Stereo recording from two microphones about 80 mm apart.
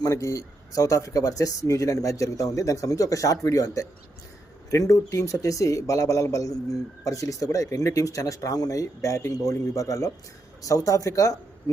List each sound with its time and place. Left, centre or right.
0.0 s speech: left